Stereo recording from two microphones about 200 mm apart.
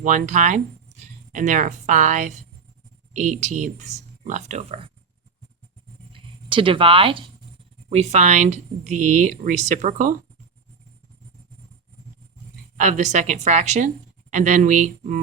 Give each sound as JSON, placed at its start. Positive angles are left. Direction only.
{"t": 0.0, "sound": "a woman's voice", "side_deg": -40}
{"t": 6.1, "sound": "a woman's voice", "side_deg": -25}
{"t": 12.7, "sound": "a woman's voice", "side_deg": -35}